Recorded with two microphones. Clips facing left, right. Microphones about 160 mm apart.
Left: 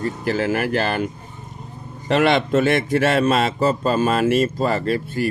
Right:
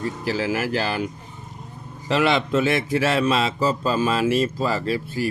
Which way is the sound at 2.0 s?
50° left (ahead or behind).